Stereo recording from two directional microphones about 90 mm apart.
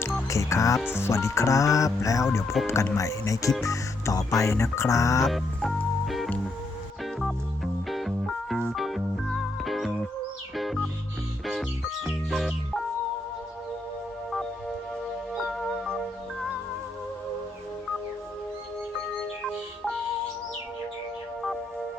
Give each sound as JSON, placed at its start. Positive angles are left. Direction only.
{"t": 0.3, "sound": "music", "side_deg": 35}
{"t": 3.6, "sound": "speech", "side_deg": 35}
{"t": 4.4, "sound": "music", "side_deg": 30}
{"t": 5.5, "sound": "music", "side_deg": 0}
{"t": 12.0, "sound": "music", "side_deg": -5}
{"t": 15.4, "sound": "music", "side_deg": 0}
{"t": 19.4, "sound": "music", "side_deg": 5}